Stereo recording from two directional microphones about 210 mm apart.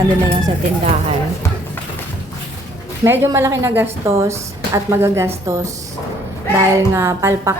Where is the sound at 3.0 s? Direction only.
15° right (ahead or behind).